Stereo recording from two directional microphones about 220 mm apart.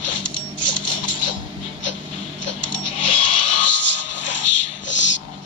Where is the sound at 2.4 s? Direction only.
75° left (ahead or behind).